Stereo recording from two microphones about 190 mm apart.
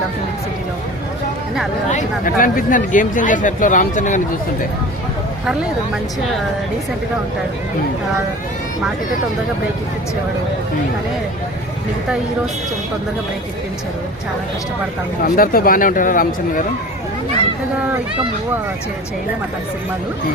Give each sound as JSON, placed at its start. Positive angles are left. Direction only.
{"t": 1.9, "sound": "speech", "side_deg": 45}
{"t": 15.2, "sound": "speech", "side_deg": 50}